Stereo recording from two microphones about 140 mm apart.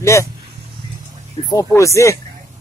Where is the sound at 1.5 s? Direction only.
25° left (ahead or behind).